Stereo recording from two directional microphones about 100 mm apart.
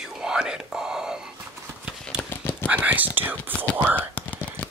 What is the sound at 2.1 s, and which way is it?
Horse, 20° left (ahead or behind).